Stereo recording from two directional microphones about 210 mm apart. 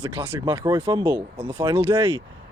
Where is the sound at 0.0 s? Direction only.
20° right (ahead or behind).